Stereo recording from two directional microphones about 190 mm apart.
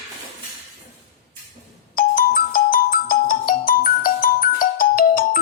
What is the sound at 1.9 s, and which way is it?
Ringtone, 50° left (ahead or behind).